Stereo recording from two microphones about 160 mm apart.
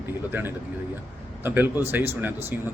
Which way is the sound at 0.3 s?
10° right (ahead or behind).